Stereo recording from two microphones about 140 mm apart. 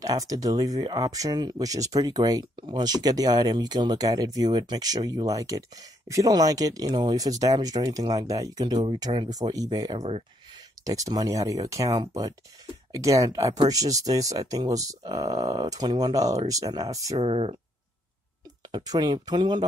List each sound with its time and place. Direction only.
0.0 s speech: 25° right (ahead or behind)
17.2 s speech: 45° right (ahead or behind)
18.9 s speech: 30° right (ahead or behind)